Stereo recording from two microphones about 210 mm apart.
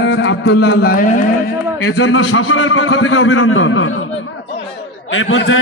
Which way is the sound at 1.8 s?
85° left.